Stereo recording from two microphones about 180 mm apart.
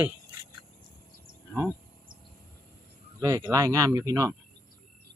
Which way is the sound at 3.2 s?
20° right (ahead or behind).